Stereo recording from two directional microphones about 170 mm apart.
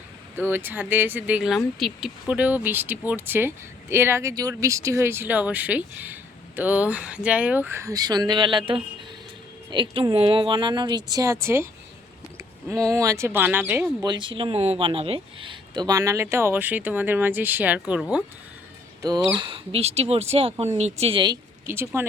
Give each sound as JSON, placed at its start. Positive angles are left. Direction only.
{"t": 0.5, "sound": "speech", "side_deg": -10}
{"t": 14.0, "sound": "speech", "side_deg": -25}
{"t": 19.0, "sound": "speech", "side_deg": -25}
{"t": 21.7, "sound": "speech", "side_deg": -15}